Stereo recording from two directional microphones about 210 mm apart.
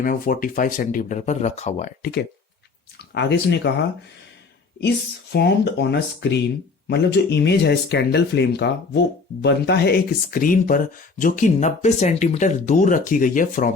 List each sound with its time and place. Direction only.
0.0 s speech: 40° left (ahead or behind)
3.2 s speech: 55° left (ahead or behind)
5.3 s speech: 50° left (ahead or behind)